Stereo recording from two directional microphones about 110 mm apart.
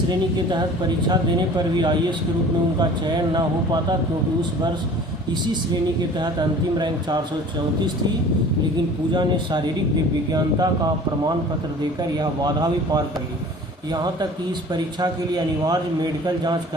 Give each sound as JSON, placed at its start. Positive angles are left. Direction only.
{"t": 1.0, "sound": "speech", "side_deg": -40}
{"t": 3.3, "sound": "speech", "side_deg": -40}
{"t": 6.7, "sound": "speech", "side_deg": -40}
{"t": 10.3, "sound": "speech", "side_deg": -40}
{"t": 15.6, "sound": "speech", "side_deg": -35}